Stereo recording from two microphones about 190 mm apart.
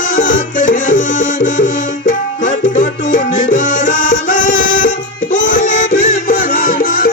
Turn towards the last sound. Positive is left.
turn(degrees=50)  # may be behind; listen again after turning